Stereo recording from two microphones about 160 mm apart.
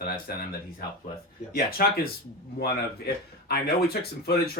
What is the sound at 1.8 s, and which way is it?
A man's voice, 70° left (ahead or behind).